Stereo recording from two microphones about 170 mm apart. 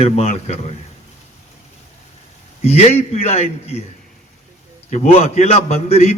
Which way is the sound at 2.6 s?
40° left (ahead or behind).